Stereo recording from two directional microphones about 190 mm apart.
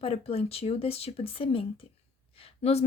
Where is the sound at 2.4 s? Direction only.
35° left (ahead or behind).